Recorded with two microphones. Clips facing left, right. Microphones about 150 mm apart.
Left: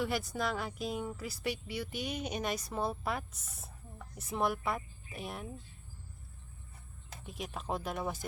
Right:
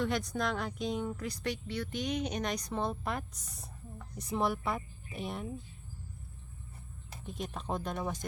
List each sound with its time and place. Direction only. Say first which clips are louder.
0.0 s speech: right 2 dB; 5° left (ahead or behind)
7.3 s speech: right 1 dB; 5° left (ahead or behind)